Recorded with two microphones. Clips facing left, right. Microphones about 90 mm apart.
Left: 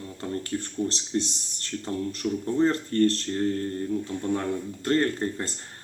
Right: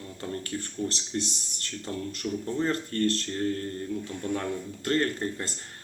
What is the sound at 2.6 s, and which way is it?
Speech, 30° left (ahead or behind).